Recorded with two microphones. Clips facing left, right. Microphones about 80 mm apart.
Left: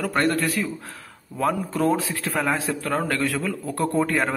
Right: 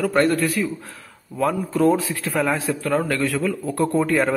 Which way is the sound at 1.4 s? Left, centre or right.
Left.